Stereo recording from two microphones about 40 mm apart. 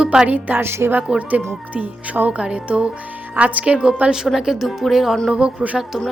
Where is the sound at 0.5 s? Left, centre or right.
Right.